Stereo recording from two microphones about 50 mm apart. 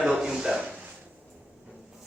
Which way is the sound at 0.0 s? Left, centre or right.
Centre.